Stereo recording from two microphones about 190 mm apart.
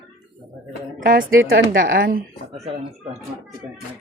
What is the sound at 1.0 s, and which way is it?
Speech, 45° right (ahead or behind).